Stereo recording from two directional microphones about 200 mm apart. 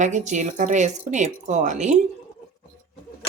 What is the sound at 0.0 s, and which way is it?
A woman's voice, 40° right (ahead or behind).